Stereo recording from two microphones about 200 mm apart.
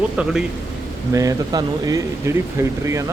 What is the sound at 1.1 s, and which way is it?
Speech, 15° right (ahead or behind).